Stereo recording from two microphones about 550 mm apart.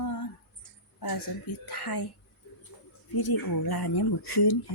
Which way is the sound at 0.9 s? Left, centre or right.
Left.